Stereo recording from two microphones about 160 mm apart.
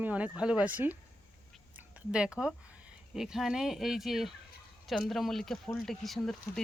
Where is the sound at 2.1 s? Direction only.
5° right (ahead or behind).